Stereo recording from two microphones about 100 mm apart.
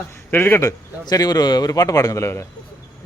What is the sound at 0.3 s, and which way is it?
Speech, 20° left (ahead or behind).